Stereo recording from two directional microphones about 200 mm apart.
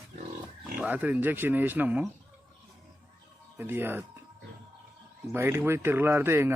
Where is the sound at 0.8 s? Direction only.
5° right (ahead or behind).